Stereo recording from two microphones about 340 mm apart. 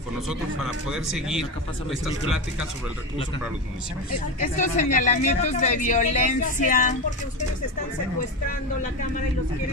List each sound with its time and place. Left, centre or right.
0.8 s speech: centre
4.4 s speech: left